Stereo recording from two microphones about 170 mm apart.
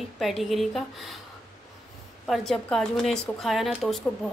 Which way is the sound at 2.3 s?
Centre (ahead or behind).